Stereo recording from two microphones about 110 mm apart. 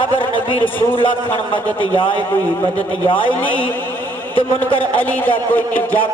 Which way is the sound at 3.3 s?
15° left (ahead or behind).